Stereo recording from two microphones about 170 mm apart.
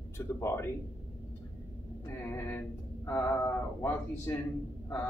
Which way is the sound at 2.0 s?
15° left (ahead or behind).